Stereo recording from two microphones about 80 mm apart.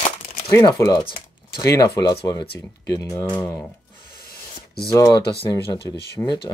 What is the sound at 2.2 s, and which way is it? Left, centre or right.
Speech, left.